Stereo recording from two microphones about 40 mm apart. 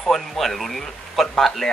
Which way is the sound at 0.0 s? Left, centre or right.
Centre.